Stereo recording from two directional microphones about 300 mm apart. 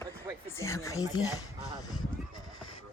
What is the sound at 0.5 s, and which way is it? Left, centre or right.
Speech, centre.